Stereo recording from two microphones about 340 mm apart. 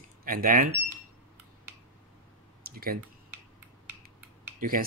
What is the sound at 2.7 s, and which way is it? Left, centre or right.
Typing, right.